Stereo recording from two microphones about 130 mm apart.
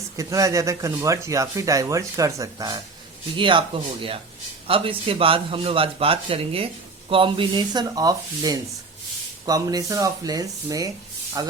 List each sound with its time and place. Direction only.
0.2 s speech: 25° right (ahead or behind)
3.3 s speech: 40° right (ahead or behind)
4.6 s a man's voice: 45° right (ahead or behind)